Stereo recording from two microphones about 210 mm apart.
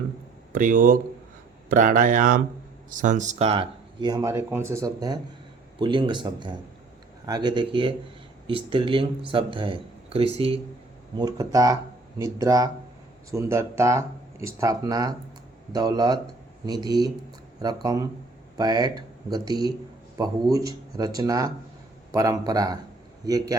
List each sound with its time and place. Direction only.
0.5 s speech: 40° right (ahead or behind); by 23.6 s 15° right (ahead or behind)